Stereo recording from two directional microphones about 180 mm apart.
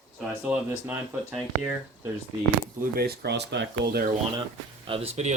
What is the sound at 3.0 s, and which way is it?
Speech, 65° right (ahead or behind).